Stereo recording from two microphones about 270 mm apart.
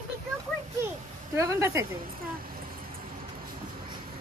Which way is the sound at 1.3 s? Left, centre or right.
Centre.